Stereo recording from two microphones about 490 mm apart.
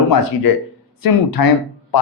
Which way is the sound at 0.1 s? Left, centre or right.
Left.